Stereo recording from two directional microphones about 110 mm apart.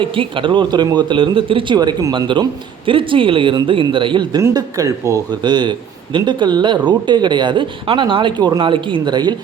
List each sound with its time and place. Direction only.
0.0 s speech: 50° right (ahead or behind)
4.4 s speech: 30° right (ahead or behind)